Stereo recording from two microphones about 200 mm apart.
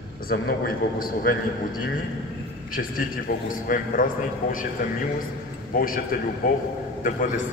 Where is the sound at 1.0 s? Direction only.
45° left (ahead or behind).